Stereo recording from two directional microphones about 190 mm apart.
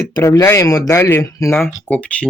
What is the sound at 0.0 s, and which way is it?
Speech, 15° left (ahead or behind).